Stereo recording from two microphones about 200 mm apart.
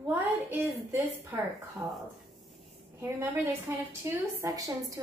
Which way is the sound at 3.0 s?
10° right (ahead or behind).